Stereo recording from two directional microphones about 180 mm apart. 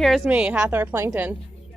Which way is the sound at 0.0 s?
Centre (ahead or behind).